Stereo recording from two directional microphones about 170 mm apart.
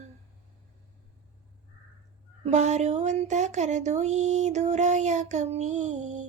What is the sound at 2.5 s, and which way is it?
Speech, 45° right (ahead or behind).